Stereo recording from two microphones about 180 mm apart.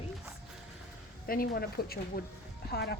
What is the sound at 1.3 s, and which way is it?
Speech, 55° left (ahead or behind).